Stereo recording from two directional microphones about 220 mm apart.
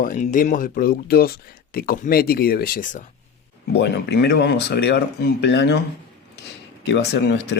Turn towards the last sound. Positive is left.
turn(degrees=50)  # may be behind; listen again after turning